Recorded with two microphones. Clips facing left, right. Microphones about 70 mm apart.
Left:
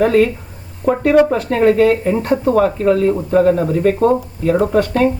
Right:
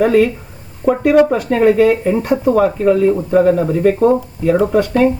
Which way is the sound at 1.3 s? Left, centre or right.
Centre.